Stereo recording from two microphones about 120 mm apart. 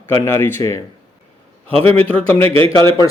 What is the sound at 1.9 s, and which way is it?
Speech, 15° left (ahead or behind).